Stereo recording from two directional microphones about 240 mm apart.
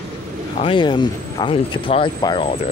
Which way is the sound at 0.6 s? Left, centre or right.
Centre.